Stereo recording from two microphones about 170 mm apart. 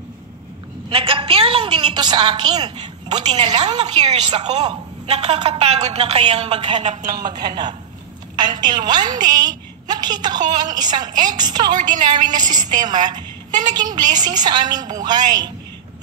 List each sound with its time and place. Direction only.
0.8 s a woman's voice: 30° right (ahead or behind)
3.8 s a woman's voice: 40° right (ahead or behind)
7.2 s a woman's voice: 25° right (ahead or behind)